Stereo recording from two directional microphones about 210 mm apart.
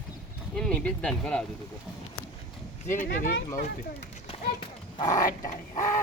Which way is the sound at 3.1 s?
50° left (ahead or behind).